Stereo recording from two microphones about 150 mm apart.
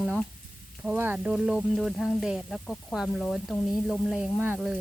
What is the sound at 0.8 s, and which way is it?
Speech, 10° right (ahead or behind).